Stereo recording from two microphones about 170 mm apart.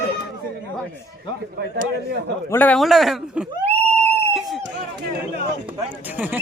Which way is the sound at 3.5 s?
35° right (ahead or behind).